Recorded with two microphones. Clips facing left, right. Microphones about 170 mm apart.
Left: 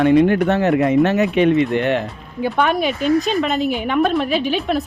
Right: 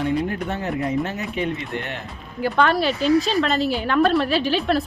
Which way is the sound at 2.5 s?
15° left (ahead or behind).